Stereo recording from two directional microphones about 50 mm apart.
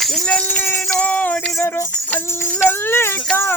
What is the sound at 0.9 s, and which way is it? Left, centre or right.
Music, left.